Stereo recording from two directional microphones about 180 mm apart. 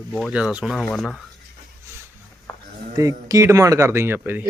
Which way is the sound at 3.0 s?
20° right (ahead or behind).